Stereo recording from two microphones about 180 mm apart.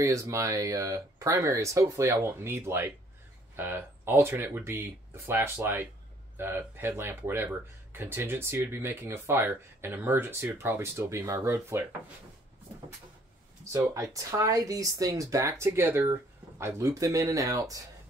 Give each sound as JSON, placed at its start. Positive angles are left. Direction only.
{"t": 0.0, "sound": "speech", "side_deg": -15}
{"t": 13.7, "sound": "speech", "side_deg": -15}